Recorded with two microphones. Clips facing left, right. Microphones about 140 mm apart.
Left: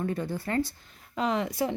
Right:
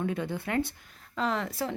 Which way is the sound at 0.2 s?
20° right (ahead or behind).